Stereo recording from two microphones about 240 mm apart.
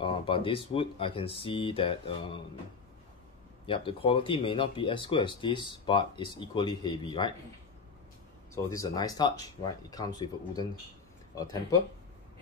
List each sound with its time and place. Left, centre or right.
0.0 s speech: left
3.6 s speech: left
8.6 s speech: centre